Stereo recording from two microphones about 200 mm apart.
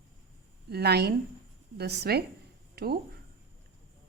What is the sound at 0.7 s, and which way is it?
A woman's voice, 55° right (ahead or behind).